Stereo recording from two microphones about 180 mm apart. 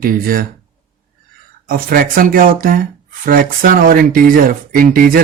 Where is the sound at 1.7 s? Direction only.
55° right (ahead or behind).